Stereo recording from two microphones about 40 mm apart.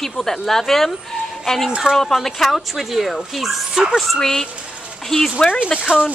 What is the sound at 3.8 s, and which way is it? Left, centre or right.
Speech, centre.